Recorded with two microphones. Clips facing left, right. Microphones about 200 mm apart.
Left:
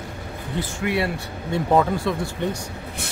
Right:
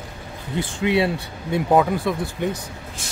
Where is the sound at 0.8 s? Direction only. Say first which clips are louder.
Right 4 dB; 25° right (ahead or behind).